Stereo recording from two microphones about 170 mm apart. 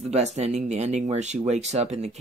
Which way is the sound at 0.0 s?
40° right (ahead or behind).